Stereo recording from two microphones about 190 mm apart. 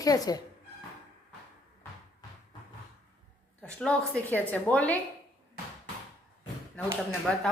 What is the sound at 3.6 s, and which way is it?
A woman's voice, 5° left (ahead or behind).